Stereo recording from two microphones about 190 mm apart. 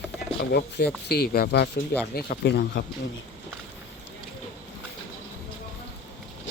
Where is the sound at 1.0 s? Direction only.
55° left (ahead or behind).